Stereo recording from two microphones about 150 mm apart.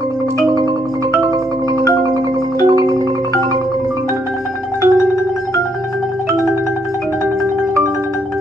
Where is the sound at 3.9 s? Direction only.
20° right (ahead or behind).